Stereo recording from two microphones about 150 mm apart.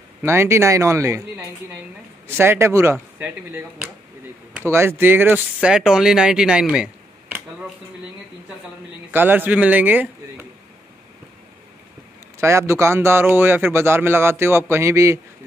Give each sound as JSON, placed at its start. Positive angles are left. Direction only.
{"t": 0.2, "sound": "speech", "side_deg": -15}
{"t": 9.1, "sound": "a man's voice", "side_deg": -15}
{"t": 12.4, "sound": "speech", "side_deg": -15}